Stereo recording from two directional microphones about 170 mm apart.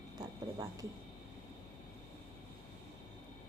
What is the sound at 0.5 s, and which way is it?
Speech, 20° right (ahead or behind).